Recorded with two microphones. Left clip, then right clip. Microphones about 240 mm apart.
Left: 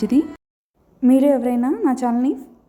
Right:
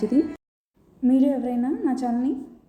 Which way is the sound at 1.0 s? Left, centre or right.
Left.